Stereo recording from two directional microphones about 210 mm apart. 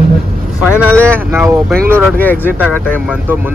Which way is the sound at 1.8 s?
10° right (ahead or behind).